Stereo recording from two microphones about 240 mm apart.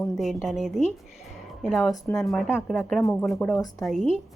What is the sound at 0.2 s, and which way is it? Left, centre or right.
Speech, centre.